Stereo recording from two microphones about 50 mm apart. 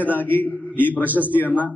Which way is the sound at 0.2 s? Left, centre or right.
Left.